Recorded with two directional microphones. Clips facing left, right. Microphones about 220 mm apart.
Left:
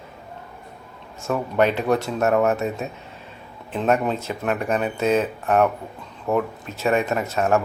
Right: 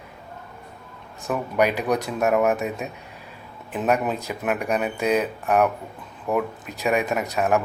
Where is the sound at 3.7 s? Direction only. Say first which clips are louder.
Left 2 dB; 5° right (ahead or behind).